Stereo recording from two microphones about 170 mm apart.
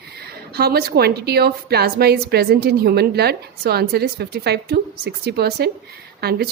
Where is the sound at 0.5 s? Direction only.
70° right (ahead or behind).